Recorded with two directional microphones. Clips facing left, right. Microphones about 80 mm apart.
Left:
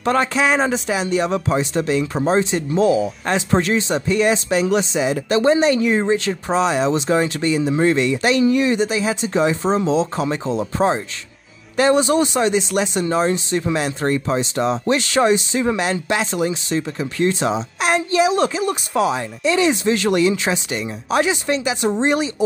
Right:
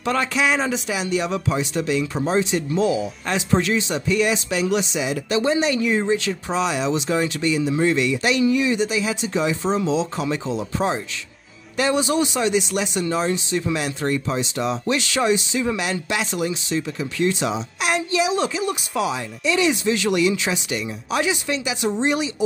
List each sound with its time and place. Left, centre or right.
0.0 s speech: left